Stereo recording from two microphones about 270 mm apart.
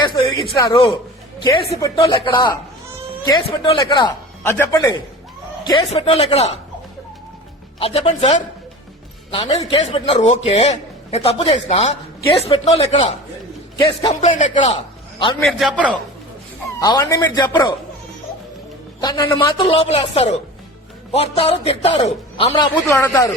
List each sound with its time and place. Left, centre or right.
0.0 s a woman's voice: centre
7.8 s a man's voice: left
15.4 s a man's voice: centre
16.8 s a woman's voice: centre
19.0 s a woman's voice: centre